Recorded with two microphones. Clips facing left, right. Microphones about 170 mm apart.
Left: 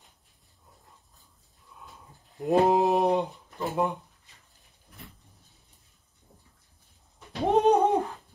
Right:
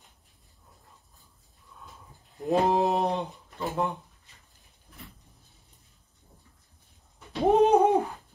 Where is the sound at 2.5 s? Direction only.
20° left (ahead or behind).